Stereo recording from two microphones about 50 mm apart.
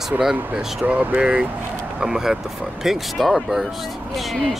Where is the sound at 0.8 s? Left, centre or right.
Right.